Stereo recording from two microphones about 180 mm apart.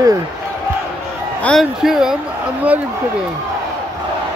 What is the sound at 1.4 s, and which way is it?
Speech, centre (ahead or behind).